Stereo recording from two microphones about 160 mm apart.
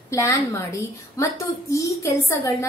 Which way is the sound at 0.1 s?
20° left (ahead or behind).